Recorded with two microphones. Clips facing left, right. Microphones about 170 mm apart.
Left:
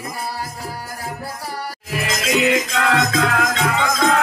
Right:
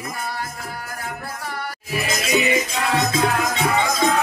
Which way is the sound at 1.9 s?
90° left.